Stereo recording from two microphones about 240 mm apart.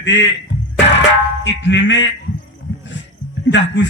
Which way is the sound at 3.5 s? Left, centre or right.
Left.